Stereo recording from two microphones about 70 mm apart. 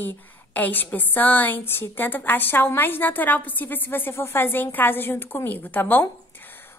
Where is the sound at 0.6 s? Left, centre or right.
Left.